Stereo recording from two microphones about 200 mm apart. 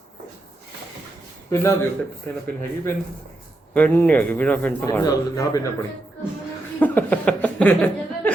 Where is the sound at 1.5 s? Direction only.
15° left (ahead or behind).